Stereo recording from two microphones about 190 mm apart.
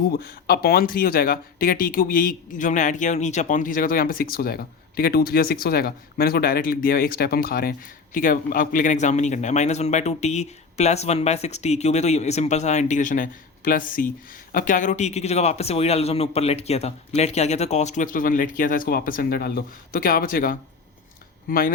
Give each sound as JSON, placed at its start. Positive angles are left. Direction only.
{"t": 0.1, "sound": "speech", "side_deg": 55}